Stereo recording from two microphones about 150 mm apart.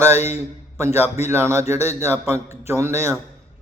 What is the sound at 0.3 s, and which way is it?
A man's voice, 15° right (ahead or behind).